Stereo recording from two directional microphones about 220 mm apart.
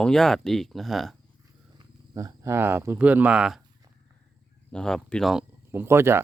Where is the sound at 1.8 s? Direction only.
15° right (ahead or behind).